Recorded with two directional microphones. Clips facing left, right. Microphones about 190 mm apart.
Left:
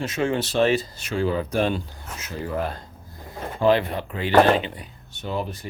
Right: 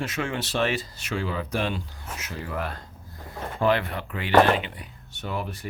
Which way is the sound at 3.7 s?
30° left (ahead or behind).